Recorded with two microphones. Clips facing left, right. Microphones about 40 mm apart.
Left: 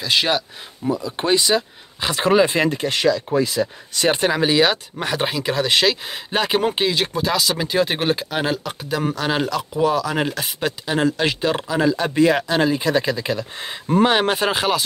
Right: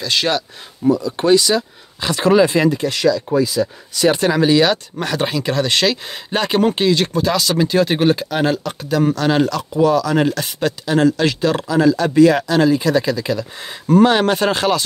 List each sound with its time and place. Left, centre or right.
0.0 s speech: centre
2.7 s speech: left
4.1 s speech: centre